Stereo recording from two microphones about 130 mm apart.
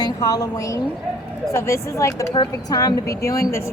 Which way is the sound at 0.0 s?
30° left (ahead or behind).